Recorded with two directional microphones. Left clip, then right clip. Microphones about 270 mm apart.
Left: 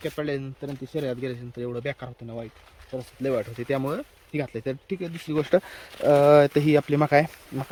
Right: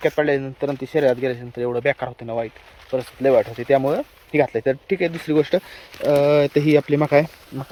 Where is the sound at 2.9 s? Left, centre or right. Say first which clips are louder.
Right 11 dB; right.